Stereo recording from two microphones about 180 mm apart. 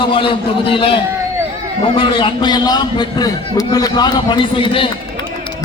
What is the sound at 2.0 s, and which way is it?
A man's voice, 30° left (ahead or behind).